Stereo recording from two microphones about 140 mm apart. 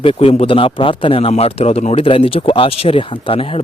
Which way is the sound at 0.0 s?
40° left (ahead or behind).